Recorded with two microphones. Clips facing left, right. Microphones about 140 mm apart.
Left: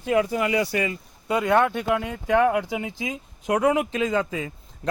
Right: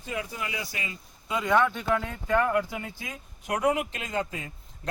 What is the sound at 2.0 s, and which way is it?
Speech, 75° left (ahead or behind).